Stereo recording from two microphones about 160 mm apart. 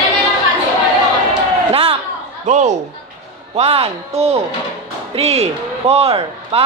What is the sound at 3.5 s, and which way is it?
A woman's voice, 40° right (ahead or behind).